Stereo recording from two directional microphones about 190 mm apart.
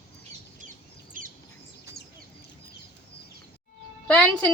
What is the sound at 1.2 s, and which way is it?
Bird, 45° right (ahead or behind).